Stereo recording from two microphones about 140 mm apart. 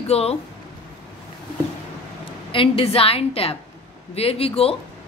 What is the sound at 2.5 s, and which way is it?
A woman's voice, 40° left (ahead or behind).